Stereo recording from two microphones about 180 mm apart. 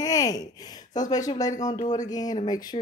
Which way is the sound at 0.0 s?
20° left (ahead or behind).